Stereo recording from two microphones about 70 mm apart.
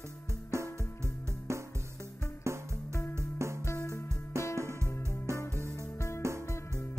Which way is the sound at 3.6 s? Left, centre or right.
Left.